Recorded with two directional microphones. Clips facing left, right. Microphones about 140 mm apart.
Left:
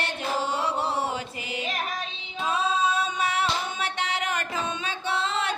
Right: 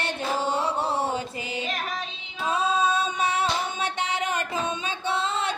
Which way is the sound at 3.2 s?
25° right (ahead or behind).